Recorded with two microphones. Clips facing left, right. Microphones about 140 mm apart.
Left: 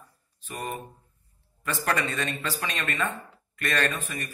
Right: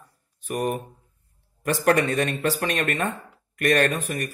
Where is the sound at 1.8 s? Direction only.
50° right (ahead or behind).